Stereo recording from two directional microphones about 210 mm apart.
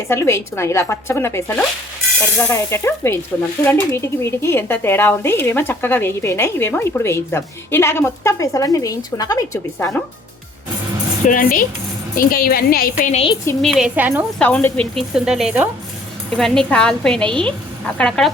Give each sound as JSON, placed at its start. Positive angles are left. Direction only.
{"t": 0.1, "sound": "speech", "side_deg": 10}
{"t": 11.3, "sound": "a woman's voice", "side_deg": 40}
{"t": 13.6, "sound": "speech", "side_deg": 0}
{"t": 14.3, "sound": "a woman's voice", "side_deg": 5}